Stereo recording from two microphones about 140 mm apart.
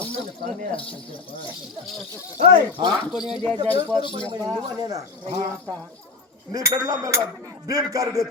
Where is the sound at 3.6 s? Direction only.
35° right (ahead or behind).